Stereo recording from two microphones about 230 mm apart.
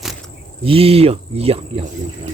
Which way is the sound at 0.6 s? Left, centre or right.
Right.